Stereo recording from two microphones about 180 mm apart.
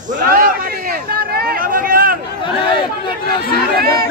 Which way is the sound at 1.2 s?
55° right (ahead or behind).